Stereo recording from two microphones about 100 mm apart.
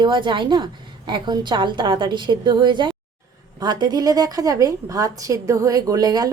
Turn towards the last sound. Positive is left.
turn(degrees=-40)  # may be behind; listen again after turning